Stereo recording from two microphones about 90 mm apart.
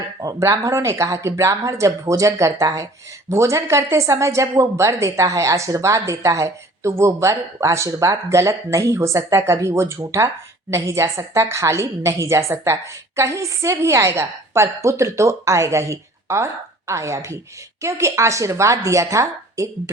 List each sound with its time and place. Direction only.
0.2 s speech: 40° right (ahead or behind)